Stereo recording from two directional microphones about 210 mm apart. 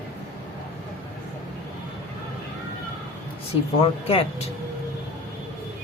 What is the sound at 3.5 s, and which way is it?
Speech, 30° left (ahead or behind).